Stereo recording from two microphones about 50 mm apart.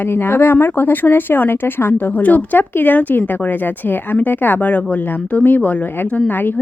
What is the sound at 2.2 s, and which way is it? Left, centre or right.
Speech, left.